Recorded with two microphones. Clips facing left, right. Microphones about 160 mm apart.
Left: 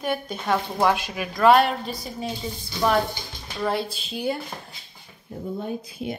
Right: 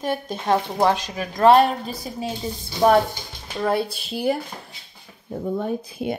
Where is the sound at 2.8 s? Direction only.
40° right (ahead or behind).